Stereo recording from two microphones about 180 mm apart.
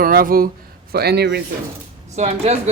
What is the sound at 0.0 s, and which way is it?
Speech, 55° right (ahead or behind).